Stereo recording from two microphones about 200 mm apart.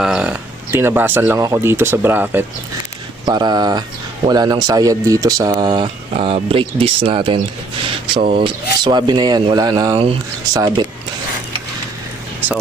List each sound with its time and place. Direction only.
0.0 s speech: 5° right (ahead or behind)
3.2 s speech: 20° right (ahead or behind)